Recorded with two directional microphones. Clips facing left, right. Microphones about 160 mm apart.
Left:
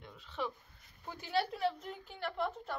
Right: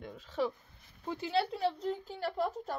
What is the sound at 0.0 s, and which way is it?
Speech, 45° right (ahead or behind).